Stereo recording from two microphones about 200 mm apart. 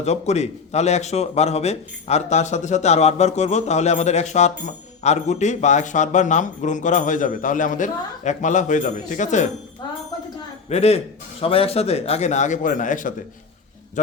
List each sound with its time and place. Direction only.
0.0 s a man's voice: 35° left (ahead or behind)
10.7 s a man's voice: 30° left (ahead or behind)